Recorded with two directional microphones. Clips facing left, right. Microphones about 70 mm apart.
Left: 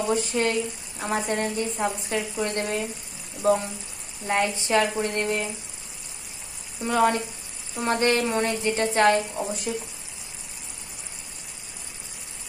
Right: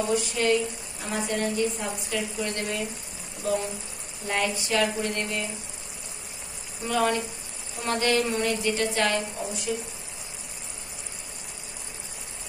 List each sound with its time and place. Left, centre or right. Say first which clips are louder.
0.1 s speech: even; left
4.3 s speech: left 4 dB; left
6.9 s speech: left 3 dB; left